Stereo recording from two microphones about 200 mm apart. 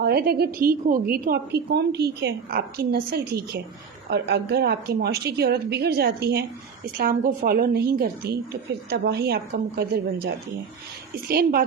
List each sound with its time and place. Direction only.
0.0 s a woman's voice: 50° right (ahead or behind)